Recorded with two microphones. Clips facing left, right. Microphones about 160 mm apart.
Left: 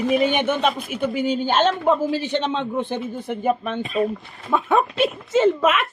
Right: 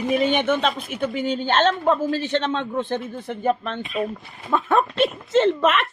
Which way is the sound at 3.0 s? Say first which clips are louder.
Left 1 dB; centre (ahead or behind).